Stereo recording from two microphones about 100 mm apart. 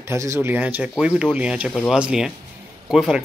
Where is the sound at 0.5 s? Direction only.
15° right (ahead or behind).